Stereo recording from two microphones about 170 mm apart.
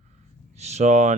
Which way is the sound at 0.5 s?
40° right (ahead or behind).